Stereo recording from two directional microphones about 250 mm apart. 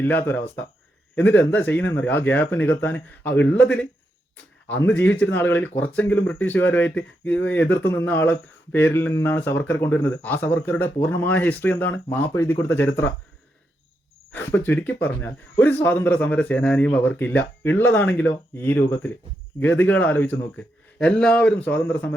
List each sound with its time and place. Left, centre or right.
0.0 s speech: centre
14.3 s speech: centre